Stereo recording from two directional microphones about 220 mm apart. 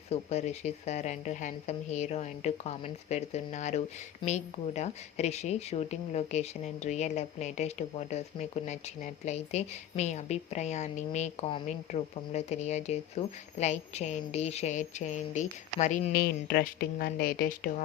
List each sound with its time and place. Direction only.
0.1 s speech: 30° left (ahead or behind)
16.1 s speech: 45° left (ahead or behind)